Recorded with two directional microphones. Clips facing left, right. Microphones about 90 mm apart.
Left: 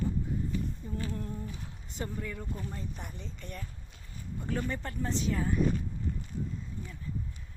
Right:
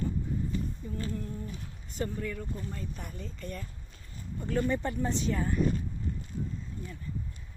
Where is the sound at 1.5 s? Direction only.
20° left (ahead or behind).